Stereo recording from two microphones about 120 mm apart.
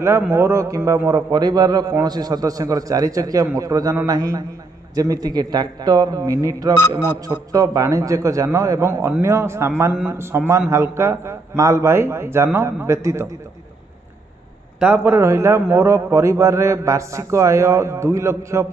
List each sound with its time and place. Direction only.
0.0 s a man's voice: 20° right (ahead or behind)
14.8 s a man's voice: 15° right (ahead or behind)